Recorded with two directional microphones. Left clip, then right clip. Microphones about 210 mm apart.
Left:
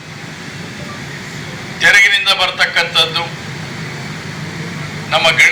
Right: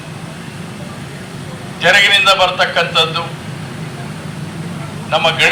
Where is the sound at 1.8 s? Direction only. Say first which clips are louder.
Even; 40° right (ahead or behind).